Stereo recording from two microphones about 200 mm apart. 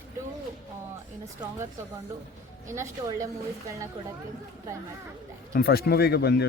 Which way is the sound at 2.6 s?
15° right (ahead or behind).